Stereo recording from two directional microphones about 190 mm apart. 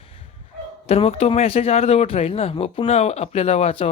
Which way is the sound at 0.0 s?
30° left (ahead or behind).